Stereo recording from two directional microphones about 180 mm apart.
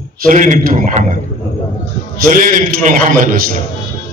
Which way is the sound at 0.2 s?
45° right (ahead or behind).